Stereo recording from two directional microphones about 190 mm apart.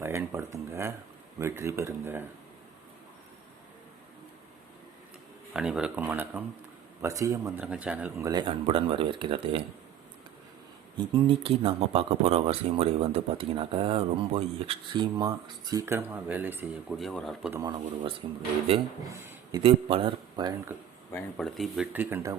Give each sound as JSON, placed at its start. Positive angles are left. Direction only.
{"t": 0.0, "sound": "speech", "side_deg": -15}
{"t": 5.5, "sound": "speech", "side_deg": -5}
{"t": 10.9, "sound": "speech", "side_deg": -25}
{"t": 17.5, "sound": "speech", "side_deg": -20}
{"t": 19.2, "sound": "speech", "side_deg": -15}
{"t": 21.1, "sound": "speech", "side_deg": 5}
{"t": 22.1, "sound": "speech", "side_deg": -15}